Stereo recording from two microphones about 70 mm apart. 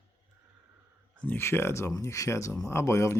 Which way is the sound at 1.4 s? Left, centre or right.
Left.